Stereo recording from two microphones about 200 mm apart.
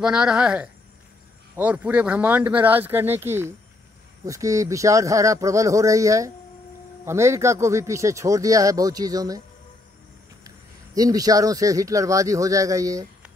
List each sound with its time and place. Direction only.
0.0 s a man's voice: 5° right (ahead or behind)
11.0 s a man's voice: 20° right (ahead or behind)